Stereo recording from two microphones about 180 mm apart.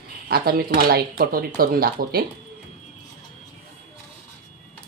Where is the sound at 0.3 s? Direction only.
60° right (ahead or behind).